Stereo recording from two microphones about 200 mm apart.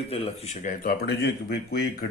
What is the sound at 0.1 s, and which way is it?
Speech, 30° left (ahead or behind).